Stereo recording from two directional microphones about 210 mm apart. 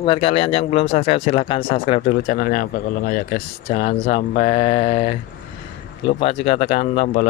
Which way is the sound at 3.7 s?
25° left (ahead or behind).